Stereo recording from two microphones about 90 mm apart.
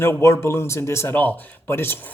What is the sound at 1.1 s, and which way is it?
Speech, 20° left (ahead or behind).